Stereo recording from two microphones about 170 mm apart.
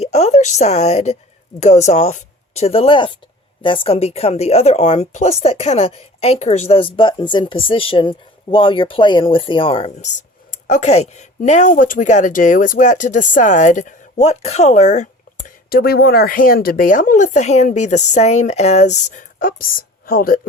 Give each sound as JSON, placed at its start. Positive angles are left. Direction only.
{"t": 0.0, "sound": "a woman's voice", "side_deg": 40}
{"t": 10.5, "sound": "a woman's voice", "side_deg": 45}